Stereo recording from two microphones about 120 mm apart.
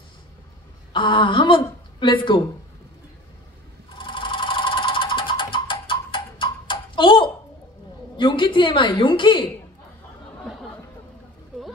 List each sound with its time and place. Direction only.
0.9 s a woman's voice: 45° left (ahead or behind)
4.0 s a sound: 40° left (ahead or behind)
8.2 s a woman's voice: 40° left (ahead or behind)
10.5 s chatter: centre (ahead or behind)